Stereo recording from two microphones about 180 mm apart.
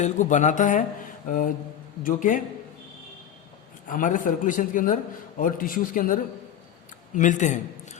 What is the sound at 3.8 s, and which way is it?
A man's voice, 45° left (ahead or behind).